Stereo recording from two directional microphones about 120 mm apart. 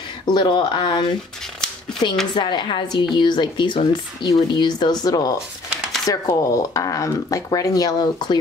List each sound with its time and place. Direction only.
0.3 s a woman's voice: 40° left (ahead or behind)
2.3 s a woman's voice: 45° left (ahead or behind)